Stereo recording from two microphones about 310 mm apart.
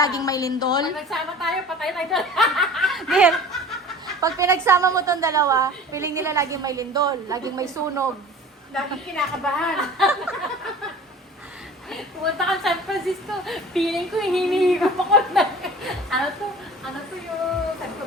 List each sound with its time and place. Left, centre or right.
0.0 s a woman's voice: centre
0.9 s a woman's voice: centre
9.1 s a woman's voice: centre
11.9 s a woman's voice: centre